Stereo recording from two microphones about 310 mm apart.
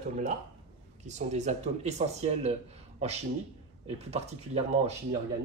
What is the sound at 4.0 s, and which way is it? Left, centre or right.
Speech, right.